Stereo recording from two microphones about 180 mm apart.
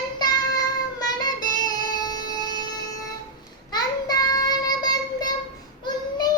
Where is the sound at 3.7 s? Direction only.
20° left (ahead or behind).